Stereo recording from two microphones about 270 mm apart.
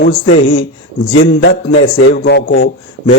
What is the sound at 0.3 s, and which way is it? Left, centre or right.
A man's voice, left.